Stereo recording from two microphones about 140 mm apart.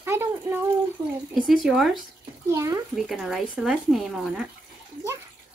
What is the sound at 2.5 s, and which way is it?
Speech, 20° right (ahead or behind).